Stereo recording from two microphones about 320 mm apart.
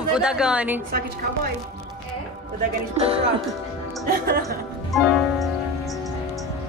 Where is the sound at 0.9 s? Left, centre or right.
Right.